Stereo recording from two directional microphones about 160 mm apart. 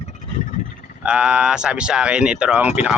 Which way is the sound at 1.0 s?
5° right (ahead or behind).